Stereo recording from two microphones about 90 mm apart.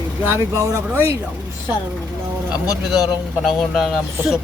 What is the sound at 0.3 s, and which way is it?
Speech, 30° right (ahead or behind).